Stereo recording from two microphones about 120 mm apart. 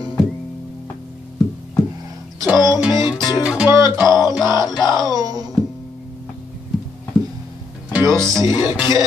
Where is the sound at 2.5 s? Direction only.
35° left (ahead or behind).